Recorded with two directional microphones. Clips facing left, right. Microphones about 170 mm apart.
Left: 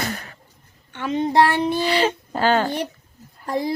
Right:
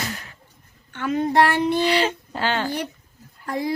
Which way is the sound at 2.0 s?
45° left (ahead or behind).